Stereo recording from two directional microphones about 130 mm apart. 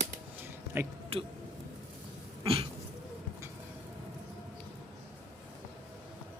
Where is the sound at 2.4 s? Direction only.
45° right (ahead or behind).